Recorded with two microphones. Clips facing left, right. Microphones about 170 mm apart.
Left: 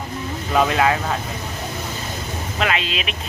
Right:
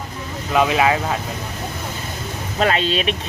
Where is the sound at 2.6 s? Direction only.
35° right (ahead or behind).